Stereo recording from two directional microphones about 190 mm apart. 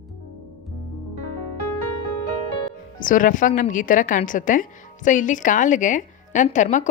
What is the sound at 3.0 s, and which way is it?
A woman's voice, 45° left (ahead or behind).